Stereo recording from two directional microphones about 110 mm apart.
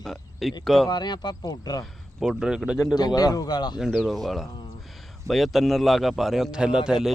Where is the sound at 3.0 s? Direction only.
35° left (ahead or behind).